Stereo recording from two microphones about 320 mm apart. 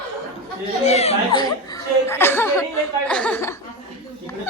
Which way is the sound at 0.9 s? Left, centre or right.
Centre.